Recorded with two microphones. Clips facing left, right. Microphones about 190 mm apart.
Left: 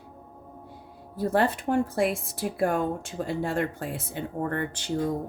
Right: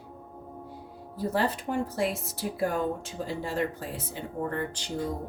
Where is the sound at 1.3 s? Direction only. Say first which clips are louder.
Left 5 dB; 50° left (ahead or behind).